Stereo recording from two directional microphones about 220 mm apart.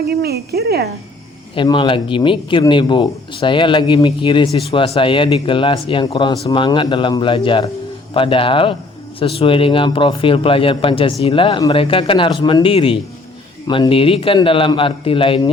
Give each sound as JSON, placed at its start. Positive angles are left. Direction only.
{"t": 0.0, "sound": "speech", "side_deg": -45}
{"t": 1.5, "sound": "a man's voice", "side_deg": 20}